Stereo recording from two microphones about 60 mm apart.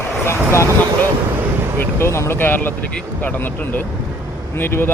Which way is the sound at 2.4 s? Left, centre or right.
Left.